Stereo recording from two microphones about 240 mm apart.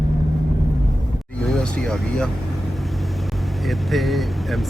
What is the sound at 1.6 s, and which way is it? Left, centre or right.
Speech, centre.